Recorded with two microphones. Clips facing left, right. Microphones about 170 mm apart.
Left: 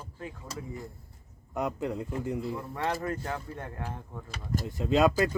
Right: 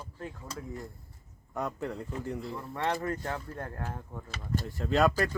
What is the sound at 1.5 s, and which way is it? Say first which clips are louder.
Speech: left 3 dB; 15° left (ahead or behind).